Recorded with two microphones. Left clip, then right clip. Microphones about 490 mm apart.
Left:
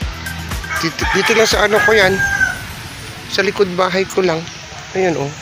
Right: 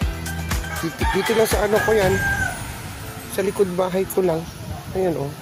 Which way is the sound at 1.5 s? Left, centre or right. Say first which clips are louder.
Left 7 dB; right.